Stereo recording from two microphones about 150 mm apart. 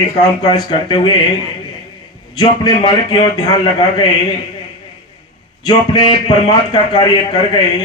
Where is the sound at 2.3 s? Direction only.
30° left (ahead or behind).